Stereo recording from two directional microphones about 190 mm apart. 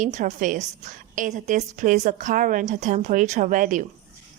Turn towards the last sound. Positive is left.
turn(degrees=-40)  # may be behind; listen again after turning